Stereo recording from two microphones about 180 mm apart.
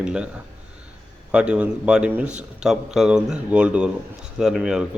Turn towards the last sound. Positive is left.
turn(degrees=-5)  # may be behind; listen again after turning